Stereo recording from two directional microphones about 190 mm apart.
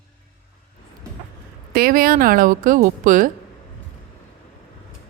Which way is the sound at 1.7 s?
50° right (ahead or behind).